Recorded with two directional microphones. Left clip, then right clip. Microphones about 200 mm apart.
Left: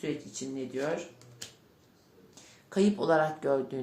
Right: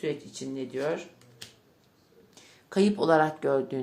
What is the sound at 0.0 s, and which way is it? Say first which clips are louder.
Speech: right 3 dB; 40° right (ahead or behind).